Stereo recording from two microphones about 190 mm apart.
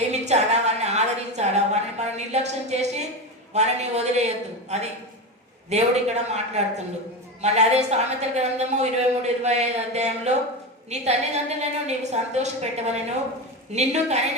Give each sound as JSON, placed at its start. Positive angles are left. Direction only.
{"t": 0.1, "sound": "a sound", "side_deg": -35}
{"t": 3.5, "sound": "a woman's voice", "side_deg": -35}
{"t": 5.7, "sound": "a woman's voice", "side_deg": -35}